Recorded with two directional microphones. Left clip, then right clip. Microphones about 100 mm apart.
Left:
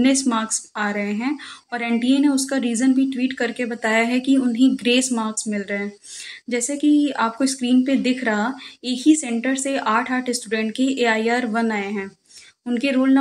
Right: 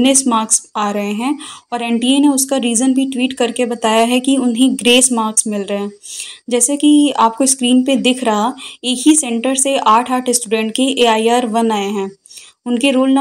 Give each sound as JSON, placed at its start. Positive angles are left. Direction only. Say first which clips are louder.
{"t": 0.0, "sound": "speech", "louder": "right 6 dB", "side_deg": -35}